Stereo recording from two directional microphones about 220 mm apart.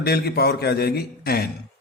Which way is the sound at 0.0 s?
45° left (ahead or behind).